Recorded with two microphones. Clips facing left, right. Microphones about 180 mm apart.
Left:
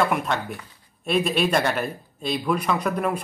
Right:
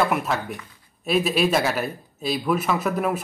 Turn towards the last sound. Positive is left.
turn(degrees=-5)  # may be behind; listen again after turning